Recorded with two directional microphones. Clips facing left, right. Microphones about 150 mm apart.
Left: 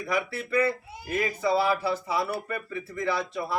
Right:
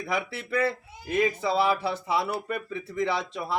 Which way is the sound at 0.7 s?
25° right (ahead or behind).